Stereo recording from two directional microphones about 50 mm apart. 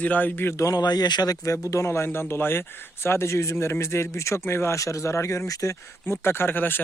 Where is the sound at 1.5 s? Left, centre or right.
Left.